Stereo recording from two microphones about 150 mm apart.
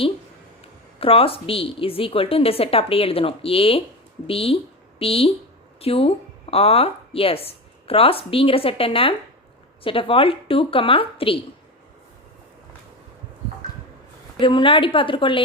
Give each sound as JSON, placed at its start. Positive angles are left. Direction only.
{"t": 0.6, "sound": "a woman's voice", "side_deg": 40}
{"t": 14.3, "sound": "a woman's voice", "side_deg": 35}